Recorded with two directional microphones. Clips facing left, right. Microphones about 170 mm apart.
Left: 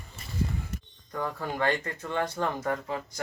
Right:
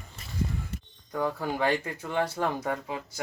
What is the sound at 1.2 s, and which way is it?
Speech, 10° right (ahead or behind).